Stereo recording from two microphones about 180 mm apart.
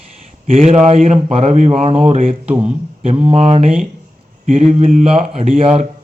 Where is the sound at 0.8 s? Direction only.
35° right (ahead or behind).